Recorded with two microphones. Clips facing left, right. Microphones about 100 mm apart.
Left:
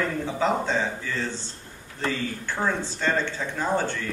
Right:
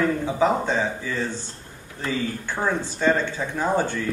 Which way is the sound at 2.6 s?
15° right (ahead or behind).